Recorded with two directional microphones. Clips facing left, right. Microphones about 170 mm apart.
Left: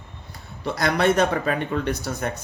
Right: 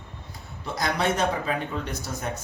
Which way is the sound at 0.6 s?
65° left (ahead or behind).